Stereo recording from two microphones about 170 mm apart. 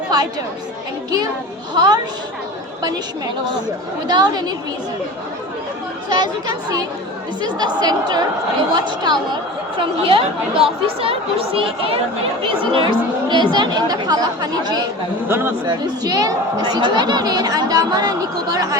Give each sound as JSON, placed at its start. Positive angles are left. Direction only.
{"t": 1.7, "sound": "speech", "side_deg": -25}
{"t": 4.0, "sound": "speech", "side_deg": -25}
{"t": 6.1, "sound": "speech", "side_deg": -25}
{"t": 15.3, "sound": "speech", "side_deg": -15}
{"t": 15.6, "sound": "speech", "side_deg": -25}